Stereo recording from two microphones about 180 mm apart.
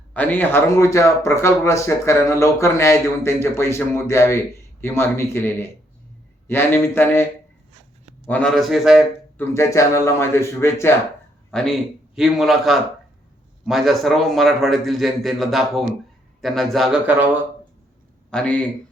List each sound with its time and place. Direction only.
0.1 s speech: 10° left (ahead or behind)
8.3 s a man's voice: 5° left (ahead or behind)
9.4 s speech: 15° left (ahead or behind)
11.5 s a man's voice: centre (ahead or behind)
18.3 s speech: 5° left (ahead or behind)